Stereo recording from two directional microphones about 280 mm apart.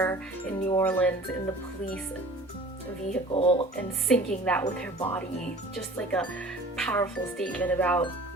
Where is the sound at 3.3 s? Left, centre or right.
Centre.